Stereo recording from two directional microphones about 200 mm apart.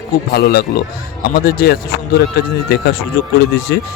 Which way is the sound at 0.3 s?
50° left (ahead or behind).